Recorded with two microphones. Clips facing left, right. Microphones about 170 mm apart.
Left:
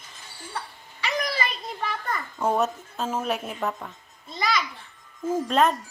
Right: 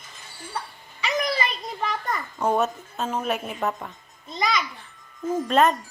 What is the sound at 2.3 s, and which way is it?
A woman's voice, centre (ahead or behind).